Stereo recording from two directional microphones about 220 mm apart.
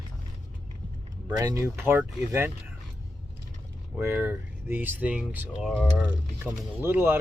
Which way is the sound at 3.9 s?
10° right (ahead or behind).